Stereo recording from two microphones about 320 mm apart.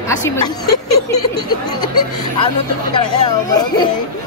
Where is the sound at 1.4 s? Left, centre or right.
Centre.